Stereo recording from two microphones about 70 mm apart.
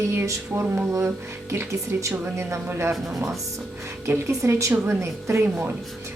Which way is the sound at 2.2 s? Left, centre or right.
Right.